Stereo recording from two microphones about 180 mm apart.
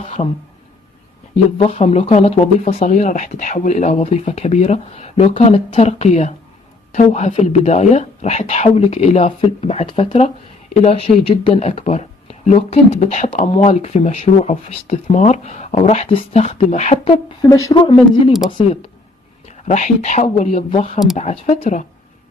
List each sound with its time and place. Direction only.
0.0 s a sound: 35° left (ahead or behind)
1.6 s speech: 35° left (ahead or behind)
17.4 s speech: 15° left (ahead or behind)
19.4 s speech: 40° left (ahead or behind)